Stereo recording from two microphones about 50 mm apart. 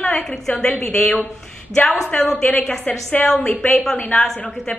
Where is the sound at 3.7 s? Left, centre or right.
Centre.